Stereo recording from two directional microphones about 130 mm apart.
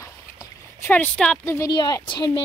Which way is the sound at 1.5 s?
30° left (ahead or behind).